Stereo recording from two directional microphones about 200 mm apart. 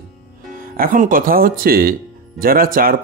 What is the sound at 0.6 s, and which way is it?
Speech, 45° right (ahead or behind).